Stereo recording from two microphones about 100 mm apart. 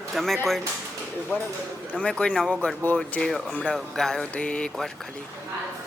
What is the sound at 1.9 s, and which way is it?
Speech, 10° left (ahead or behind).